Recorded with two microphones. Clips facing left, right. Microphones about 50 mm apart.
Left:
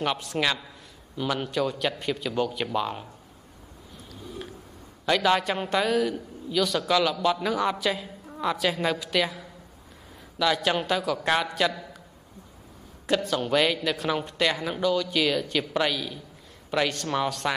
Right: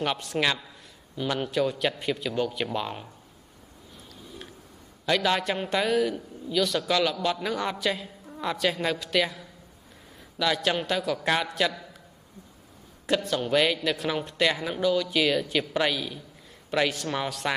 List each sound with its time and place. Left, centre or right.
0.0 s speech: centre
5.0 s speech: centre
10.4 s speech: centre
13.0 s speech: centre